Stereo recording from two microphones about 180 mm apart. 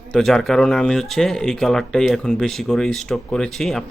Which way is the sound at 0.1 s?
5° left (ahead or behind).